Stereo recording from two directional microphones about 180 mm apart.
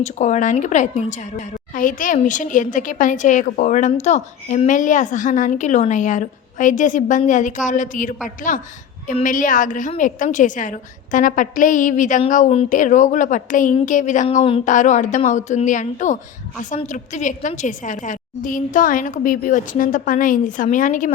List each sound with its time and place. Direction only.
0.0 s a woman's voice: 45° left (ahead or behind)
9.2 s a woman's voice: 45° left (ahead or behind)